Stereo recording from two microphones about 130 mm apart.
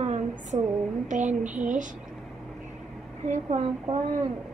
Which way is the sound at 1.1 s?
70° right (ahead or behind).